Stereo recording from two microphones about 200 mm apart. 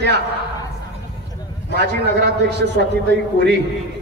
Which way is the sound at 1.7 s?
55° right (ahead or behind).